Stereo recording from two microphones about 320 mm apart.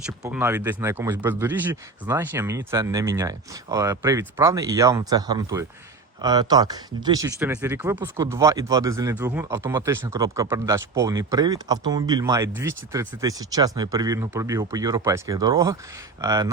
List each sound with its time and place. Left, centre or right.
0.0 s speech: centre